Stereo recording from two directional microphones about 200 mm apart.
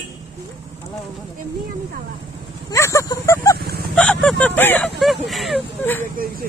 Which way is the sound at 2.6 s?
15° left (ahead or behind).